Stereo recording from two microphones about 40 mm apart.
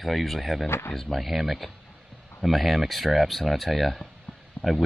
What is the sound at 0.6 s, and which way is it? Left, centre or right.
Speech, left.